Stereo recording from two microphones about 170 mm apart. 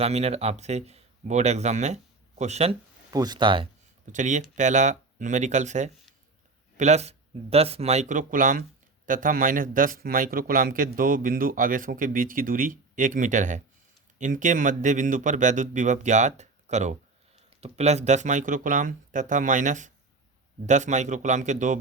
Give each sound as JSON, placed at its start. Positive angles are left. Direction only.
{"t": 0.0, "sound": "speech", "side_deg": -40}
{"t": 3.1, "sound": "speech", "side_deg": -20}
{"t": 4.0, "sound": "a man's voice", "side_deg": -45}